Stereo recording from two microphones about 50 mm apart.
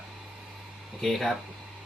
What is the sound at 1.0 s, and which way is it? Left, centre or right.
Speech, centre.